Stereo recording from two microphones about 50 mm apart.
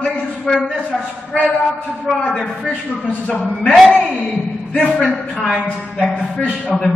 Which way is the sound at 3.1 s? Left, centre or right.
Left.